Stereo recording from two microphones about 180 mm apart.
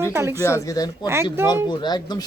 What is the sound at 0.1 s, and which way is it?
Speech, 15° right (ahead or behind).